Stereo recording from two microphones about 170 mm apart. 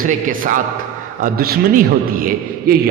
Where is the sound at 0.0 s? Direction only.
55° right (ahead or behind).